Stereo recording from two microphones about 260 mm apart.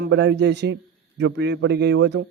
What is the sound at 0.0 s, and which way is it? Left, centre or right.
A man's voice, right.